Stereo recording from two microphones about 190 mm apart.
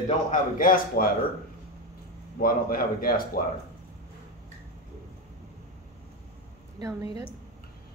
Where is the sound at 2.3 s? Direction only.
50° left (ahead or behind).